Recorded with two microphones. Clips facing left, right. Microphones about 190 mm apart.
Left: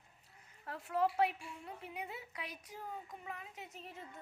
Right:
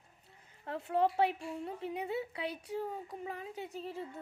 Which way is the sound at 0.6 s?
25° right (ahead or behind).